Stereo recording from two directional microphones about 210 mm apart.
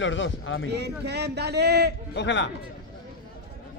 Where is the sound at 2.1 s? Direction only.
60° left (ahead or behind).